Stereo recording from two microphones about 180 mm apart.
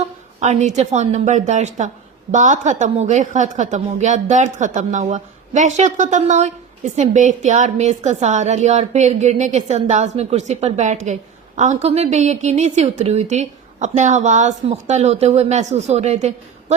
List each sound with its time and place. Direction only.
0.3 s a woman's voice: 40° right (ahead or behind)